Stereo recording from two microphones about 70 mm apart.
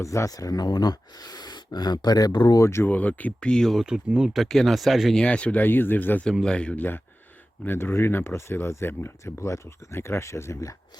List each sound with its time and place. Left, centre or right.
0.0 s speech: left
2.6 s speech: left
2.8 s speech: left
3.8 s speech: centre
4.4 s speech: centre
5.1 s speech: centre
6.4 s speech: centre
7.6 s speech: left